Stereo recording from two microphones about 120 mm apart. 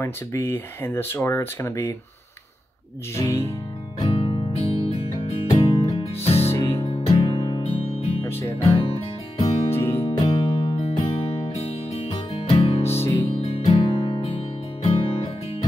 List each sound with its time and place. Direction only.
0.0 s speech: 25° left (ahead or behind)
3.2 s speech: 25° left (ahead or behind)
4.1 s music: 50° left (ahead or behind)
6.5 s music: 25° left (ahead or behind)
6.8 s music: 55° left (ahead or behind)
9.8 s music: 20° left (ahead or behind)
10.0 s music: 45° left (ahead or behind)